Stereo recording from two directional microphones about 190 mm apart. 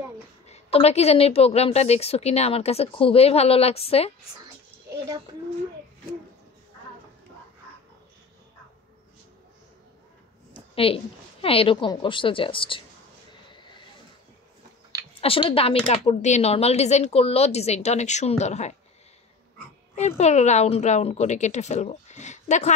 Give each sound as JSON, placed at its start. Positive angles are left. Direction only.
{"t": 0.5, "sound": "a woman's voice", "side_deg": 30}
{"t": 10.5, "sound": "a sound", "side_deg": 30}
{"t": 11.4, "sound": "a woman's voice", "side_deg": 30}
{"t": 15.1, "sound": "a woman's voice", "side_deg": 30}
{"t": 20.0, "sound": "a woman's voice", "side_deg": 35}